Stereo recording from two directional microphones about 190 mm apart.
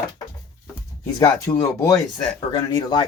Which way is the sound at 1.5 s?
15° left (ahead or behind).